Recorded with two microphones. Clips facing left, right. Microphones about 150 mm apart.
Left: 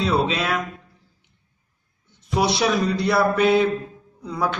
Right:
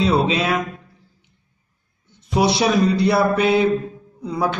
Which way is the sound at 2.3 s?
5° right (ahead or behind).